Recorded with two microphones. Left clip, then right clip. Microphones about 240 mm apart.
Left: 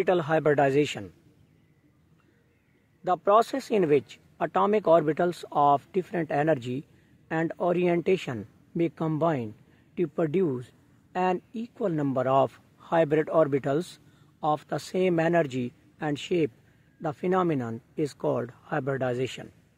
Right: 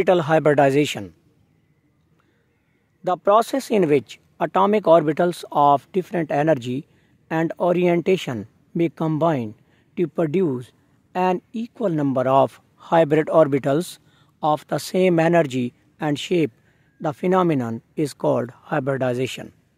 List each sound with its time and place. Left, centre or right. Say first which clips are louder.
0.0 s speech: right 7 dB; right
3.0 s speech: right 5 dB; right